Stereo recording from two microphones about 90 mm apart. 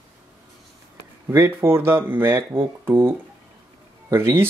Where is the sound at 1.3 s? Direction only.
30° right (ahead or behind).